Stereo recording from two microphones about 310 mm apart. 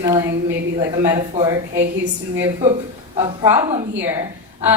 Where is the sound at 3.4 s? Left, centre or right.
Centre.